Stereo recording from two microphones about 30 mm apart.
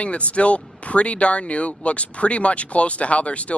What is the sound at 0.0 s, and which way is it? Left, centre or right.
Speech, left.